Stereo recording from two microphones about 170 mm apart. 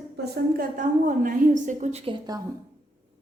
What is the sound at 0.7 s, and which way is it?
A woman's voice, 50° right (ahead or behind).